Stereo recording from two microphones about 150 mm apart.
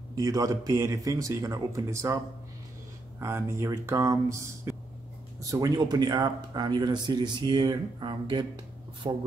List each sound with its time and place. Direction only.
0.1 s speech: 25° right (ahead or behind)
3.2 s speech: 20° right (ahead or behind)